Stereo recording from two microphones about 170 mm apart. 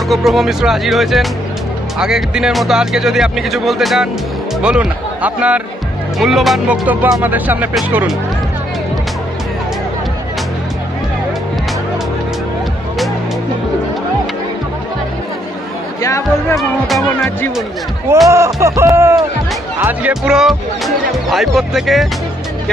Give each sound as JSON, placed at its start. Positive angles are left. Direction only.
{"t": 0.1, "sound": "speech", "side_deg": 0}
{"t": 16.0, "sound": "speech", "side_deg": 15}
{"t": 18.3, "sound": "speech", "side_deg": -15}